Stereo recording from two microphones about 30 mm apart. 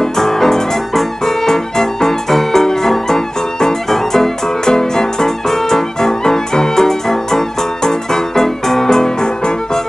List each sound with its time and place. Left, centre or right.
0.0 s music: centre